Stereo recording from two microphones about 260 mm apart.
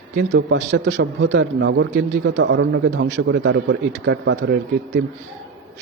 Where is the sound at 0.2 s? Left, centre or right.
Right.